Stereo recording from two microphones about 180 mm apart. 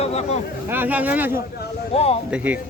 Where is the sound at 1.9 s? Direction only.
35° left (ahead or behind).